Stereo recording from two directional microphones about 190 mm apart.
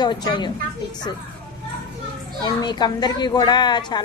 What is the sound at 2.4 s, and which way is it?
A woman's voice, 25° left (ahead or behind).